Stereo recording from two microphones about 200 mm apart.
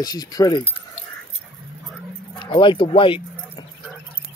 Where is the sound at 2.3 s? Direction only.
25° left (ahead or behind).